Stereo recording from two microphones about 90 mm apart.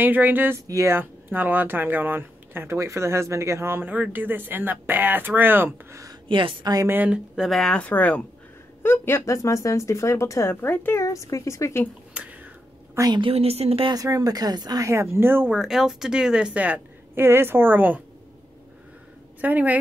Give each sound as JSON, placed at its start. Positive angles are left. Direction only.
{"t": 0.0, "sound": "speech", "side_deg": -20}
{"t": 0.7, "sound": "speech", "side_deg": -30}
{"t": 6.2, "sound": "a woman's voice", "side_deg": -75}
{"t": 6.6, "sound": "speech", "side_deg": -45}
{"t": 6.9, "sound": "speech", "side_deg": -20}
{"t": 7.3, "sound": "speech", "side_deg": 0}
{"t": 11.1, "sound": "speech", "side_deg": 35}
{"t": 12.1, "sound": "whispering", "side_deg": -15}
{"t": 13.1, "sound": "speech", "side_deg": -80}
{"t": 13.9, "sound": "speech", "side_deg": -40}
{"t": 14.9, "sound": "speech", "side_deg": -30}
{"t": 15.5, "sound": "a woman's voice", "side_deg": -5}
{"t": 19.4, "sound": "a woman's voice", "side_deg": -20}